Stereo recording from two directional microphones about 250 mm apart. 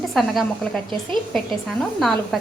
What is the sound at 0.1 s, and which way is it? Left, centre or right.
Speech, centre.